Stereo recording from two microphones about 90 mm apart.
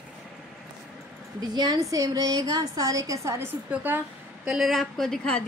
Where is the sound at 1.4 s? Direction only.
50° right (ahead or behind).